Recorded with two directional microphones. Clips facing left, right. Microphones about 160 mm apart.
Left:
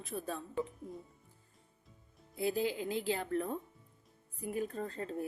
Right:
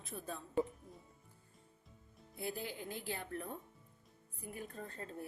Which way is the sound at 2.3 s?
90° left.